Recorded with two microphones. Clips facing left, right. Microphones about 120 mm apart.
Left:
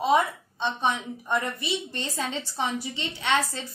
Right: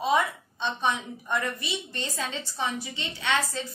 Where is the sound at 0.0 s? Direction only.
20° left (ahead or behind).